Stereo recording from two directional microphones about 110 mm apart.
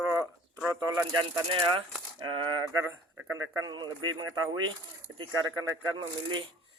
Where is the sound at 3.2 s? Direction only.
20° right (ahead or behind).